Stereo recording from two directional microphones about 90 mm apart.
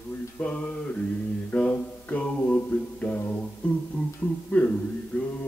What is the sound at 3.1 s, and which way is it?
Music, 20° left (ahead or behind).